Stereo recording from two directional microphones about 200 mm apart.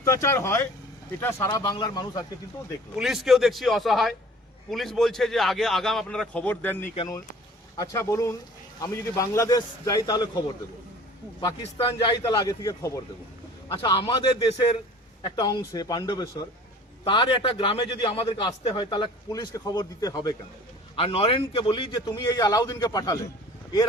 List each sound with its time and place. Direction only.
0.0 s a man's voice: 15° left (ahead or behind)
3.0 s a man's voice: centre (ahead or behind); by 10.2 s 20° left (ahead or behind)
11.6 s a man's voice: 25° left (ahead or behind)